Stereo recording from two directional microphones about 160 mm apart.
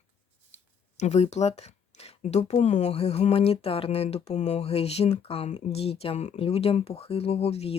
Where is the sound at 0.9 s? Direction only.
45° left (ahead or behind).